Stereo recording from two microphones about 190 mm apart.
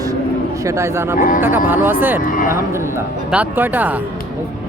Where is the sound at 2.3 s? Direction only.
45° left (ahead or behind).